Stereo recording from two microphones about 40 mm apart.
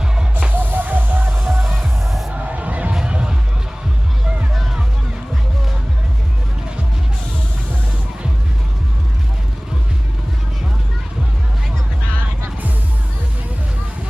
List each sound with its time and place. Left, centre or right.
0.5 s music: right
1.8 s music: centre
2.3 s music: right
2.9 s music: right